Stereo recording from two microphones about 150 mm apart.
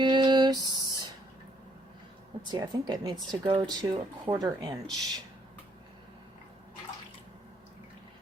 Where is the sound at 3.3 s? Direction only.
30° right (ahead or behind).